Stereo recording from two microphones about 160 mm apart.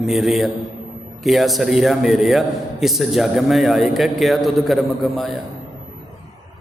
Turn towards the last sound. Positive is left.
turn(degrees=0)  # may be behind; listen again after turning